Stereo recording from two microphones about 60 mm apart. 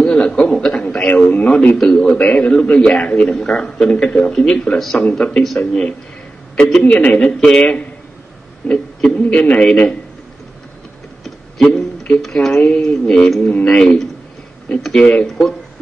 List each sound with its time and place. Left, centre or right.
0.0 s a sound: centre
1.8 s a man's voice: centre
2.1 s a man's voice: left
11.2 s a sound: centre
12.6 s a man's voice: centre
15.0 s a man's voice: centre
15.2 s speech: centre